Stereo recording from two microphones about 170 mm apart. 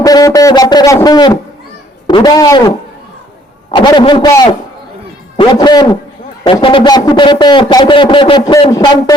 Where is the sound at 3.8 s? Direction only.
25° left (ahead or behind).